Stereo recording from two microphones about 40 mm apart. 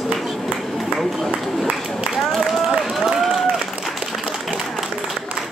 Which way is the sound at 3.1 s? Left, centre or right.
Centre.